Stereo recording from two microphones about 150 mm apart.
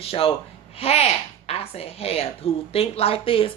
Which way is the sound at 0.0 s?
40° left (ahead or behind).